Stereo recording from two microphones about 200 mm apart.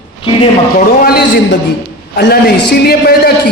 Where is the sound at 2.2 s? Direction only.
55° left (ahead or behind).